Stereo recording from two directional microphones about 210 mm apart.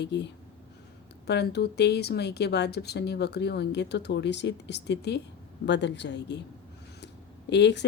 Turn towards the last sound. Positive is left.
turn(degrees=55)  # may be behind; listen again after turning